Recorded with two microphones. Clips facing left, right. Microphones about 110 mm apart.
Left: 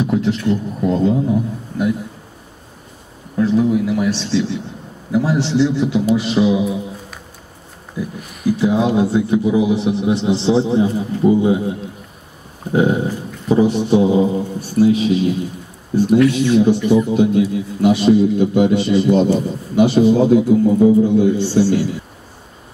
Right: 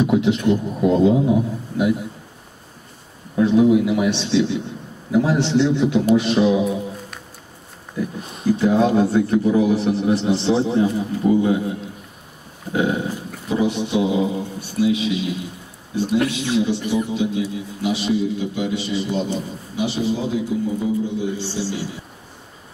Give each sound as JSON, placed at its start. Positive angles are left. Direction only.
{"t": 0.0, "sound": "a man's voice", "side_deg": -5}
{"t": 3.3, "sound": "a man's voice", "side_deg": -5}
{"t": 8.2, "sound": "speech", "side_deg": -25}
{"t": 8.5, "sound": "a man's voice", "side_deg": 5}
{"t": 12.7, "sound": "a man's voice", "side_deg": 30}